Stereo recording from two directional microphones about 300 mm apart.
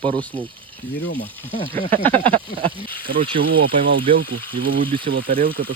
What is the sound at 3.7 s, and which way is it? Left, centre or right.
Speech, right.